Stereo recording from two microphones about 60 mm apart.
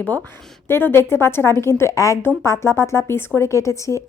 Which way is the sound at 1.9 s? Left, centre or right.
Left.